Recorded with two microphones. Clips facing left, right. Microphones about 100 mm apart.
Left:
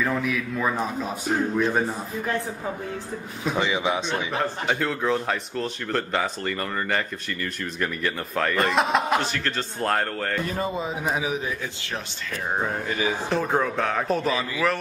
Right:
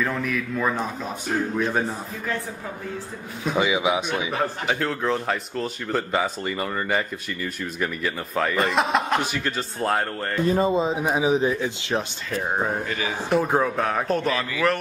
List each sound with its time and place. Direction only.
0.0 s a man's voice: centre (ahead or behind)
3.4 s a man's voice: 10° right (ahead or behind)
10.4 s speech: 25° right (ahead or behind)
12.5 s a man's voice: 15° right (ahead or behind)
12.8 s speech: 15° left (ahead or behind)
13.3 s a man's voice: 10° right (ahead or behind)